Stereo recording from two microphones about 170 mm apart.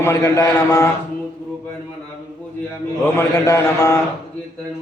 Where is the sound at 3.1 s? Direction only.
15° left (ahead or behind).